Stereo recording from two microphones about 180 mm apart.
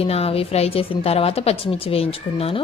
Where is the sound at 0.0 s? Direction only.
35° left (ahead or behind).